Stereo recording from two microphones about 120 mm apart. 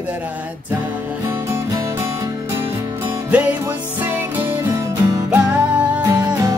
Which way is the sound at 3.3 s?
10° right (ahead or behind).